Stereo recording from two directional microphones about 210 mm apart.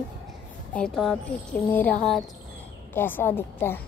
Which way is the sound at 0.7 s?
Centre (ahead or behind).